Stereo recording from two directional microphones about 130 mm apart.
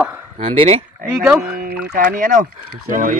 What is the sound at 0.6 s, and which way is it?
Speech, 45° right (ahead or behind).